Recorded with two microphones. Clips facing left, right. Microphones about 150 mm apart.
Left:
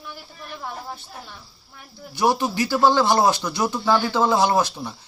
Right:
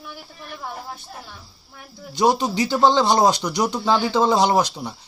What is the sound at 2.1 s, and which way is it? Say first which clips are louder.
Speech: right 2 dB; 20° right (ahead or behind).